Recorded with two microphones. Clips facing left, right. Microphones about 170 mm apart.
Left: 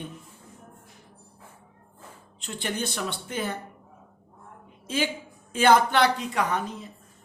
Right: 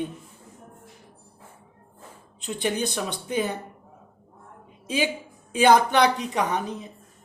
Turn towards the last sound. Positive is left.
turn(degrees=-20)  # may be behind; listen again after turning